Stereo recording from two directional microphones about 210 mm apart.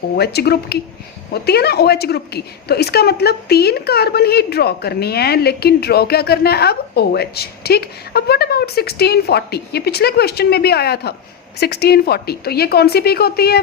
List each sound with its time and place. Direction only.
0.2 s a woman's voice: 50° left (ahead or behind)